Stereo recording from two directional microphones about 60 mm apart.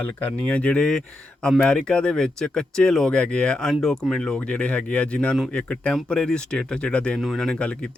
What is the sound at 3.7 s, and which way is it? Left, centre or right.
Speech, centre.